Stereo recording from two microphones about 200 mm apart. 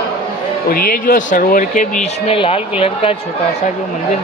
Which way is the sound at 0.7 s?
45° left (ahead or behind).